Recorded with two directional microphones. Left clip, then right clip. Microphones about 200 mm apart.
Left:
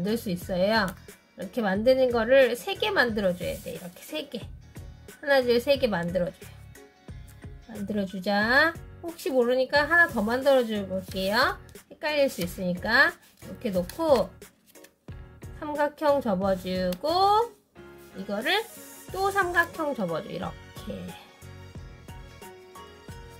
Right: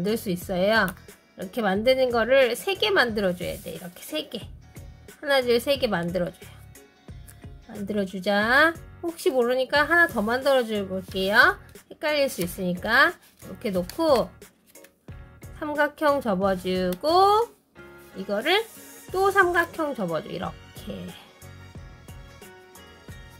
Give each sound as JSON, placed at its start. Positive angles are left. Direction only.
{"t": 0.0, "sound": "a woman's voice", "side_deg": -20}
{"t": 7.8, "sound": "a woman's voice", "side_deg": -20}
{"t": 15.8, "sound": "a woman's voice", "side_deg": -20}